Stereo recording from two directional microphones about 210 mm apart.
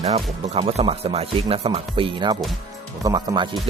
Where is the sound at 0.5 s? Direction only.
30° right (ahead or behind).